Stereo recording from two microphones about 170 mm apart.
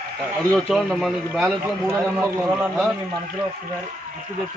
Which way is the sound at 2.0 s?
15° right (ahead or behind).